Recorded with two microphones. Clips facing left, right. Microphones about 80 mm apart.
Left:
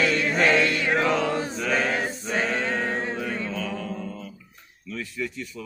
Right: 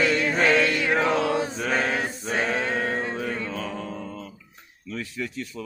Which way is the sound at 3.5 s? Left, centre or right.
Right.